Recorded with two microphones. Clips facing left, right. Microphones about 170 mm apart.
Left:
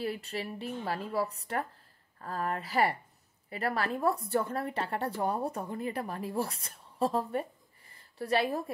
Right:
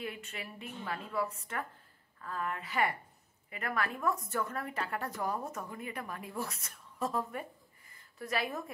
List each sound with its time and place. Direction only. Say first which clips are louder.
0.0 s a woman's voice: left 7 dB; 35° left (ahead or behind)